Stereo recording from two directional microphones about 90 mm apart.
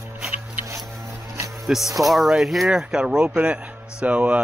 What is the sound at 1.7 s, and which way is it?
Speech, 10° right (ahead or behind).